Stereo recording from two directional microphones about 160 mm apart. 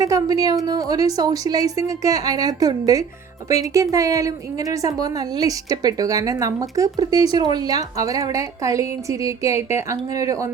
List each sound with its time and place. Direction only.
0.0 s a woman's voice: 20° right (ahead or behind)